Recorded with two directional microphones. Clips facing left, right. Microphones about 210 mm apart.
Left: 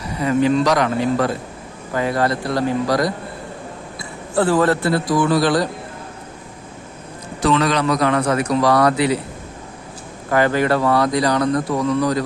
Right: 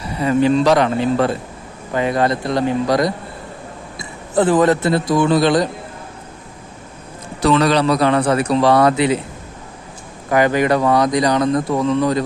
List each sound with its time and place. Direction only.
0.2 s a man's voice: 30° right (ahead or behind)
7.4 s a man's voice: 35° right (ahead or behind)
10.2 s speech: 15° right (ahead or behind)